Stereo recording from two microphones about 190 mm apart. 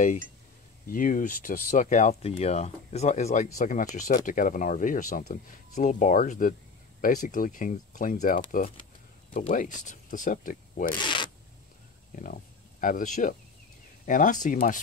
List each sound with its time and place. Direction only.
0.8 s speech: 45° left (ahead or behind)
11.0 s zipper: 25° left (ahead or behind)
12.8 s speech: 40° left (ahead or behind)